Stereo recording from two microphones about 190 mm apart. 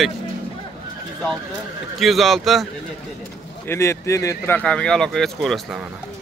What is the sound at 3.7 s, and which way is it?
Speech, 15° left (ahead or behind).